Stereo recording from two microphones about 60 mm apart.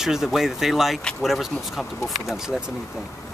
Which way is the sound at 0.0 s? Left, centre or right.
Centre.